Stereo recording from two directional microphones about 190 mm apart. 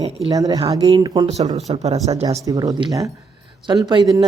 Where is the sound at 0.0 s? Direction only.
20° right (ahead or behind).